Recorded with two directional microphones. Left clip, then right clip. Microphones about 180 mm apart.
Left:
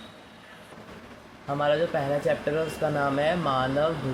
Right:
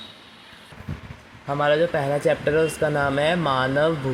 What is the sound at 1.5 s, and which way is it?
Speech, 55° right (ahead or behind).